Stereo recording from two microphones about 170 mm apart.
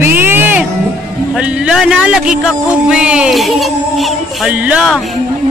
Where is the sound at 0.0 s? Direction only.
10° right (ahead or behind).